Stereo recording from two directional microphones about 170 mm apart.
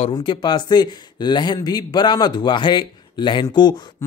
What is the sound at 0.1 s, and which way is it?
Speech, 25° left (ahead or behind).